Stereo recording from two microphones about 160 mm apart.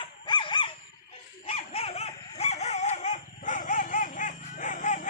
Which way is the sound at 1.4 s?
40° left (ahead or behind).